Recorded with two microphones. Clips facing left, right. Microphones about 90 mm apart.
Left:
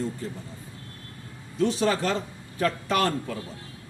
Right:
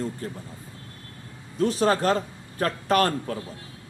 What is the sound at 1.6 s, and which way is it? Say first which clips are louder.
A man's voice: right 2 dB; 45° right (ahead or behind).